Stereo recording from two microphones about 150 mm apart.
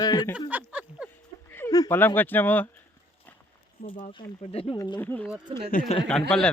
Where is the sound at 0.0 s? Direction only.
25° left (ahead or behind).